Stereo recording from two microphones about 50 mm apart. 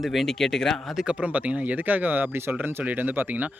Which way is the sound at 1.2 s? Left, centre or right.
Right.